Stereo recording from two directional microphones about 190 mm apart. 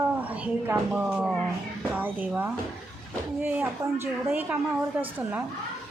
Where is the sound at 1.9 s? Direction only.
10° right (ahead or behind).